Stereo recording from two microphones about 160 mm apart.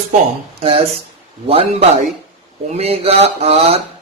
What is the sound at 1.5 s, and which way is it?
Speech, 35° right (ahead or behind).